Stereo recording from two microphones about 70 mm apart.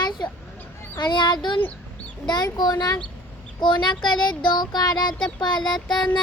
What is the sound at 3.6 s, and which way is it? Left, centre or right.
Speech, left.